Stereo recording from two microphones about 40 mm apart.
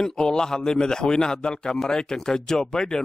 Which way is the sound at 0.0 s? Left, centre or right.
Centre.